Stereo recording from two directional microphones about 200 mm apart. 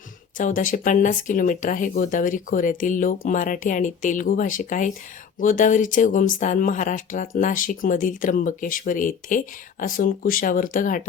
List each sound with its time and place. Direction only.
0.3 s speech: 40° left (ahead or behind)